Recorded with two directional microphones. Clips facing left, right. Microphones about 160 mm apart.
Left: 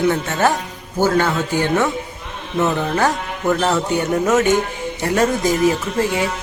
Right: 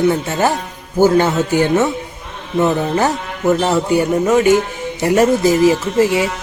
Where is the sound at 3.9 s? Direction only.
5° right (ahead or behind).